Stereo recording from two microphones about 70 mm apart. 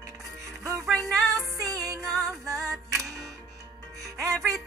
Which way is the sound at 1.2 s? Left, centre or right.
Right.